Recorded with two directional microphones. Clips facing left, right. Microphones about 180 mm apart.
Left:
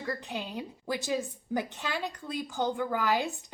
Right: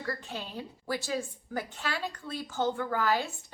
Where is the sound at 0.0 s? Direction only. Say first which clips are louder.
Left 2 dB; 15° left (ahead or behind).